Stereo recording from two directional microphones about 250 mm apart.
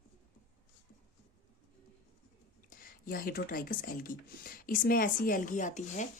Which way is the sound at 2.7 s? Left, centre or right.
Left.